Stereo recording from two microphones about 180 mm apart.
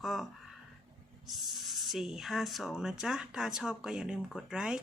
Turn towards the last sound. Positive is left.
turn(degrees=-5)  # may be behind; listen again after turning